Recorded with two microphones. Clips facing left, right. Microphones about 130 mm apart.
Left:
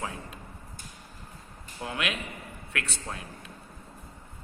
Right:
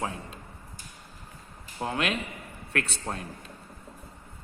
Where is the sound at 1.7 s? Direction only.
30° right (ahead or behind).